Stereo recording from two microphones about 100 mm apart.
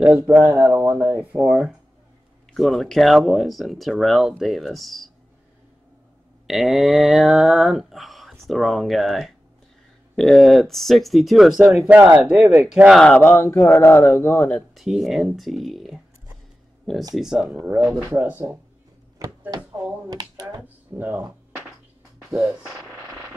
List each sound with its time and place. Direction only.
0.3 s speech: 25° right (ahead or behind)
1.4 s speech: 5° right (ahead or behind)
6.4 s speech: centre (ahead or behind)
11.9 s speech: 20° right (ahead or behind)
12.2 s speech: 5° right (ahead or behind)
12.9 s speech: 10° left (ahead or behind)
13.2 s speech: 25° left (ahead or behind)
14.7 s speech: centre (ahead or behind)
17.1 s speech: 5° right (ahead or behind)
17.5 s speech: 25° right (ahead or behind)
19.5 s a sound: 40° right (ahead or behind)
20.6 s speech: 20° right (ahead or behind)
22.3 s speech: 10° right (ahead or behind)